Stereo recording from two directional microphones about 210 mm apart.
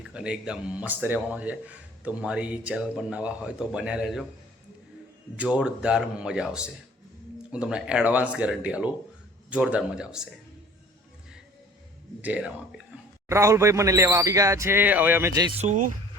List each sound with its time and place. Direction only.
0.0 s speech: 5° right (ahead or behind)
5.4 s speech: 5° right (ahead or behind)
12.2 s speech: 5° right (ahead or behind)
15.5 s speech: 35° right (ahead or behind)